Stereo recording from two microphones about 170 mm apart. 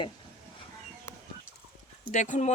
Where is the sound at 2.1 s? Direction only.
45° left (ahead or behind).